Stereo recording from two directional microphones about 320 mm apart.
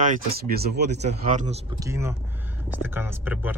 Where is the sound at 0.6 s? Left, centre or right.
Right.